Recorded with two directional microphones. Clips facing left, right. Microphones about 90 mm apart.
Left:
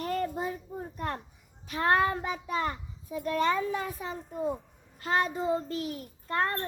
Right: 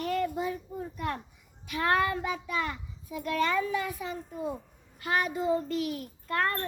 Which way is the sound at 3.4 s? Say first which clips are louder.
Even; 30° left (ahead or behind).